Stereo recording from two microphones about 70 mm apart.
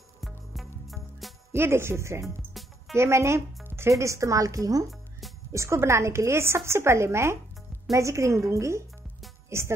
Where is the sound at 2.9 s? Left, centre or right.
Right.